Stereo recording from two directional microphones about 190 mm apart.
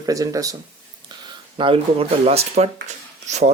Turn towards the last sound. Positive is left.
turn(degrees=-40)  # may be behind; listen again after turning